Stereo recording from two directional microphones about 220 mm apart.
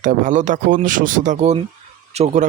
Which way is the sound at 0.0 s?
35° right (ahead or behind).